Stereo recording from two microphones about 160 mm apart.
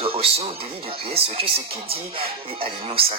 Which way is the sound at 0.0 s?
35° right (ahead or behind).